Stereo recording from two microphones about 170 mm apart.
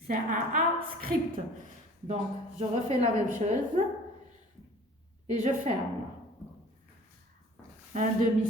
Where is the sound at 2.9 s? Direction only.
45° right (ahead or behind).